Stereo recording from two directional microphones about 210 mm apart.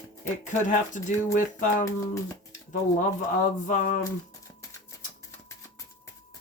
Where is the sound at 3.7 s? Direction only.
35° left (ahead or behind).